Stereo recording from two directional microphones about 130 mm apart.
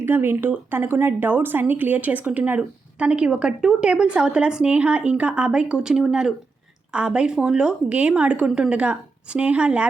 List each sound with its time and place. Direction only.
0.0 s a woman's voice: 15° right (ahead or behind)